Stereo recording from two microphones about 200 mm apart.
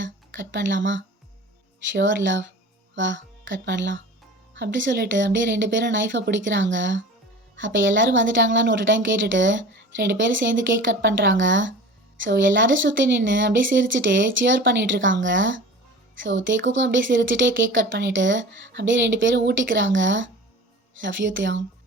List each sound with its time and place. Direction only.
0.0 s a woman's voice: 65° right (ahead or behind)